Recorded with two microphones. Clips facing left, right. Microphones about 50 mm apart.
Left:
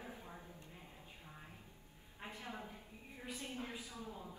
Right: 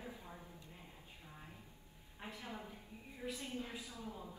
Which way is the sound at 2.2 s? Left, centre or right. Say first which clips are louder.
Even; left.